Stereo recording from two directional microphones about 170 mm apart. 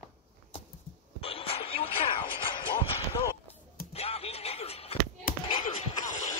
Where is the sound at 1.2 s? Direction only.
35° left (ahead or behind).